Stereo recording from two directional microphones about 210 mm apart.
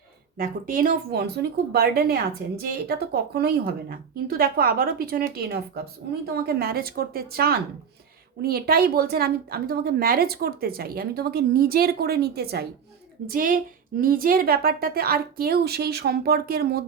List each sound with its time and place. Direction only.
0.3 s a woman's voice: 40° right (ahead or behind)